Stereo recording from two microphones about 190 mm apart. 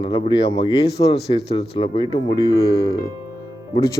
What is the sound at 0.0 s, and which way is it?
Speech, 25° left (ahead or behind).